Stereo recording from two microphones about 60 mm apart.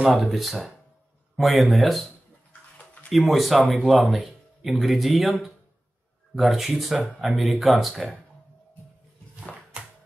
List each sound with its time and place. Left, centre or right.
0.2 s speech: centre
3.1 s speech: centre
9.7 s a sound: right